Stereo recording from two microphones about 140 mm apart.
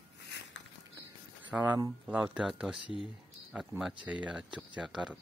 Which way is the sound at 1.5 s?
10° right (ahead or behind).